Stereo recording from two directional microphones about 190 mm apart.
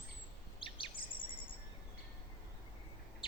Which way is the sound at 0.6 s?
25° left (ahead or behind).